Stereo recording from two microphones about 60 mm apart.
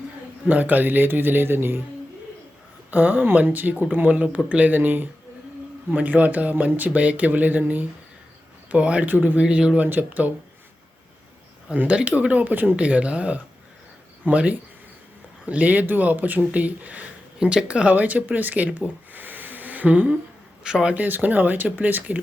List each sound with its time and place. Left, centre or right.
0.4 s a man's voice: right
2.9 s a man's voice: right
9.8 s a man's voice: right
11.9 s speech: right
12.7 s speech: right
17.4 s speech: centre
20.7 s speech: centre
20.9 s speech: right